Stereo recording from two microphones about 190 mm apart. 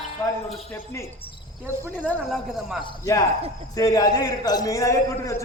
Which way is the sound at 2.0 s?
10° left (ahead or behind).